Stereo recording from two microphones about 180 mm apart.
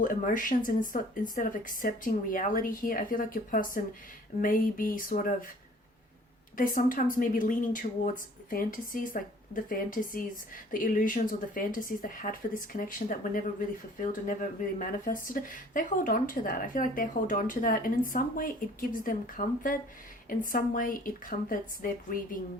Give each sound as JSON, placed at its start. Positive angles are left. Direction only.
{"t": 0.0, "sound": "speech", "side_deg": 50}
{"t": 6.6, "sound": "speech", "side_deg": 50}
{"t": 14.8, "sound": "speech", "side_deg": 50}